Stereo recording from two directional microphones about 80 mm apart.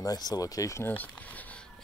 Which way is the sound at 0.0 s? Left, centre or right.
Left.